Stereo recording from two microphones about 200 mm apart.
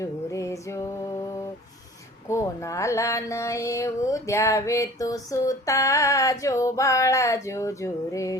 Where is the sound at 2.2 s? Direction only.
15° left (ahead or behind).